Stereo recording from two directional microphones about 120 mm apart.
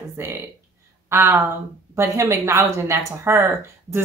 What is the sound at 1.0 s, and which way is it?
Speech, 20° right (ahead or behind).